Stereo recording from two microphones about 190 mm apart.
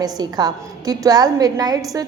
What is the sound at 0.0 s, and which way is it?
A woman's voice, 20° right (ahead or behind).